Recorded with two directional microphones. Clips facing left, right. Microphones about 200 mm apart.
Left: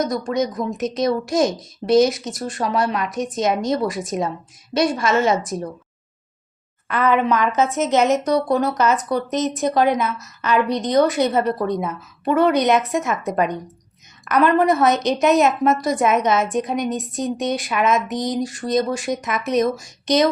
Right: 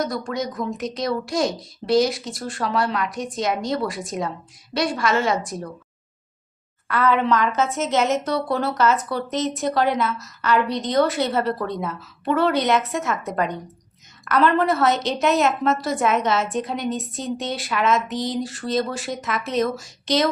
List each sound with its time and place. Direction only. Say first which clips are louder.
0.0 s a woman's voice: left 4 dB; 20° left (ahead or behind)
6.8 s a woman's voice: left 2 dB; 20° left (ahead or behind)